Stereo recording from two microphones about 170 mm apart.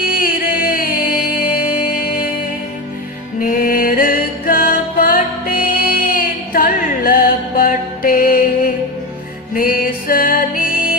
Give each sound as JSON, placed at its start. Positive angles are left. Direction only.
{"t": 0.0, "sound": "music", "side_deg": 55}
{"t": 3.4, "sound": "music", "side_deg": 55}